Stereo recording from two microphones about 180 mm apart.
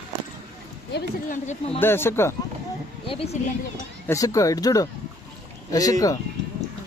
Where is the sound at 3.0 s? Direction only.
35° left (ahead or behind).